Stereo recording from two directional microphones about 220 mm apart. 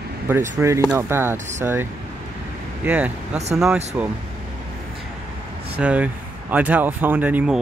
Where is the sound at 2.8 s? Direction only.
5° right (ahead or behind).